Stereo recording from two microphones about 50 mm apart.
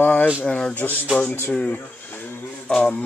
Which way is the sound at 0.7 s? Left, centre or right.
Left.